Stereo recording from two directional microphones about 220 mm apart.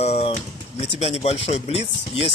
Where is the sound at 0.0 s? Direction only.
30° left (ahead or behind).